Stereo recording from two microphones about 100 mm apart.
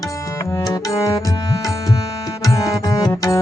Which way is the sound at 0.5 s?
35° left (ahead or behind).